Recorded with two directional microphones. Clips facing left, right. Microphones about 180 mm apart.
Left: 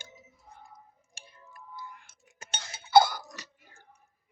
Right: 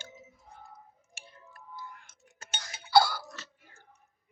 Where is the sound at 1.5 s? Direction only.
10° left (ahead or behind).